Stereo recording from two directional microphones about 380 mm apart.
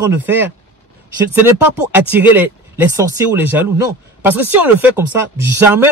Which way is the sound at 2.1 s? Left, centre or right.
Centre.